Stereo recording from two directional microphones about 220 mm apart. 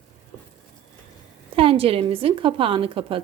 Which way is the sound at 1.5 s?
25° right (ahead or behind).